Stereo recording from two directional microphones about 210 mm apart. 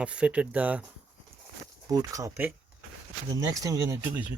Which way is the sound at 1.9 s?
15° right (ahead or behind).